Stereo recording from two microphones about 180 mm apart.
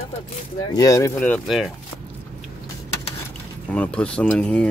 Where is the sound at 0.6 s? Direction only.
20° left (ahead or behind).